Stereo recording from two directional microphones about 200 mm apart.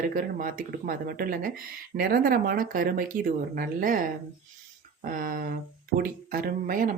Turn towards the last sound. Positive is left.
turn(degrees=-45)  # may be behind; listen again after turning